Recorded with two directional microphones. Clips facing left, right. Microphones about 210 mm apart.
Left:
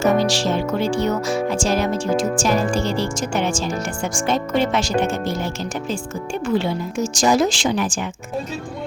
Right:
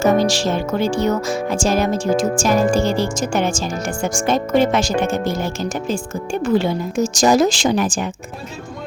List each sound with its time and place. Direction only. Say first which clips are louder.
0.0 s music: right 2 dB; 45° right (ahead or behind)
6.4 s speech: right 3 dB; 40° right (ahead or behind)